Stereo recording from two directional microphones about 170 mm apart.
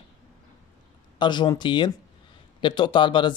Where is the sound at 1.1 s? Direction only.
25° left (ahead or behind).